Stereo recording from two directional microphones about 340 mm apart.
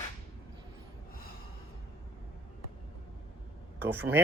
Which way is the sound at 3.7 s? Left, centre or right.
Centre.